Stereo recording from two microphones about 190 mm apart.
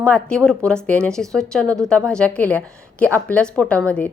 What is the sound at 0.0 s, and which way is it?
A woman's voice, 5° left (ahead or behind).